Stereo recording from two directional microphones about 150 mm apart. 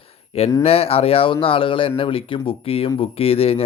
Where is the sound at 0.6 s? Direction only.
40° left (ahead or behind).